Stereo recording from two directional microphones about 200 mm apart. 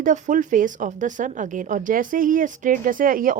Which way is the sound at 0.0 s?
40° right (ahead or behind).